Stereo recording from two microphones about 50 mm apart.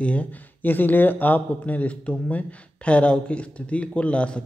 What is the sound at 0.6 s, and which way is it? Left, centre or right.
Speech, left.